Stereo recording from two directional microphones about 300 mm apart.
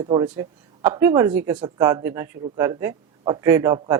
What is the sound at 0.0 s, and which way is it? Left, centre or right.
A woman's voice, centre.